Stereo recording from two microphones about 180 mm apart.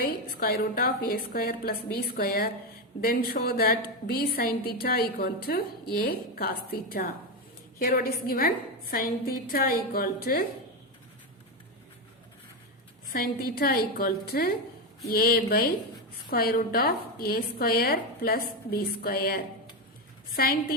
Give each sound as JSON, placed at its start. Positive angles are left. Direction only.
{"t": 0.0, "sound": "a woman's voice", "side_deg": 55}
{"t": 13.1, "sound": "a woman's voice", "side_deg": 55}